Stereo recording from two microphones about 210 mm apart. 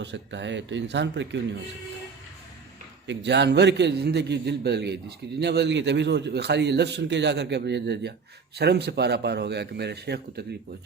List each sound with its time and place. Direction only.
0.0 s speech: 55° right (ahead or behind)
3.1 s a man's voice: 55° right (ahead or behind)